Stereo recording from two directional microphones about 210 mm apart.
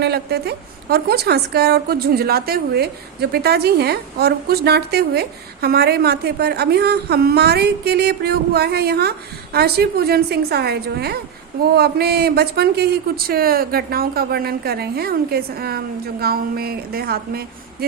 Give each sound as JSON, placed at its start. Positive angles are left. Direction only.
{"t": 0.0, "sound": "a woman's voice", "side_deg": -50}